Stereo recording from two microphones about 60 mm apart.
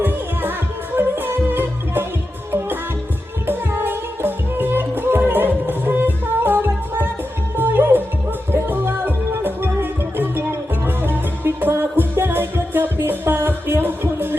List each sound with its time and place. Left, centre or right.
0.0 s music: right